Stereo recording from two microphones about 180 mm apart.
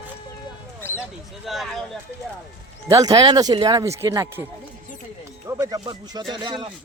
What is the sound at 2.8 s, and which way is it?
Speech, 20° right (ahead or behind).